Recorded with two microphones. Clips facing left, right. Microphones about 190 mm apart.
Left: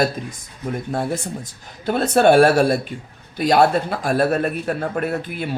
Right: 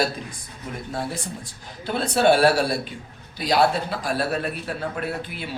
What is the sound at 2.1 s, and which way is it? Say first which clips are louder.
A man's voice: left 5 dB; 50° left (ahead or behind).